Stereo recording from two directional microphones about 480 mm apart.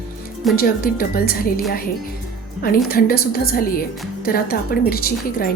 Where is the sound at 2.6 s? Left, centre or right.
Centre.